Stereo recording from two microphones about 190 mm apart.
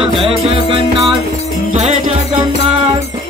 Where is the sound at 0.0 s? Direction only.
30° right (ahead or behind).